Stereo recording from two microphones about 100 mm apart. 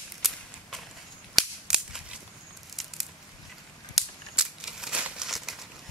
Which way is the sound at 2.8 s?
Centre (ahead or behind).